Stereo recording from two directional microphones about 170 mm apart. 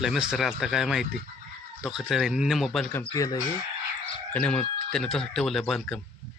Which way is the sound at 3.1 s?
20° left (ahead or behind).